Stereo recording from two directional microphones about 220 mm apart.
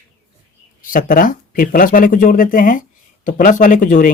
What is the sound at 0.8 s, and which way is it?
Speech, 40° left (ahead or behind).